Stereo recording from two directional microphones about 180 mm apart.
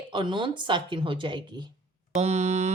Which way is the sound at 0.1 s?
25° right (ahead or behind).